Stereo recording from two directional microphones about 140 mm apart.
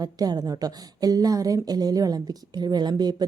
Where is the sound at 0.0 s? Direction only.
30° right (ahead or behind).